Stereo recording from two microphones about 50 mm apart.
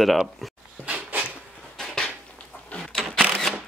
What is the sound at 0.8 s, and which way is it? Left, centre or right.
Cupboard open or close, right.